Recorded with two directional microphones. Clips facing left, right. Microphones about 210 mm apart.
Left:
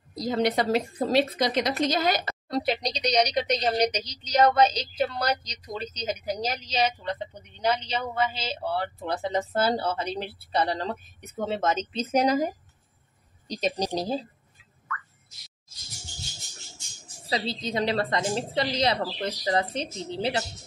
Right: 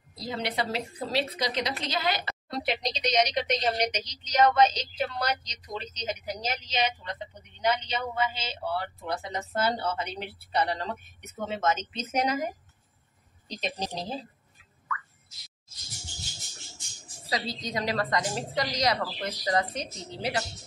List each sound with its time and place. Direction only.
0.2 s a woman's voice: 45° left (ahead or behind)
13.5 s a woman's voice: 40° left (ahead or behind)
17.3 s a woman's voice: 30° left (ahead or behind)